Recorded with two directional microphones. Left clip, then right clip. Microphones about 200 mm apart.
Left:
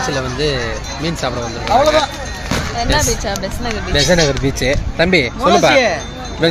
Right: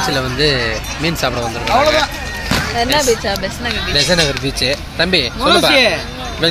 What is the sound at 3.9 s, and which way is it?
Speech, 40° left (ahead or behind).